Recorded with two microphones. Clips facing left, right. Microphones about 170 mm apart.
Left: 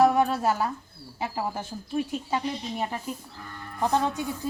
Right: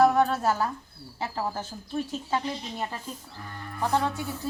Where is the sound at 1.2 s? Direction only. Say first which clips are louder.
Left 1 dB; 10° left (ahead or behind).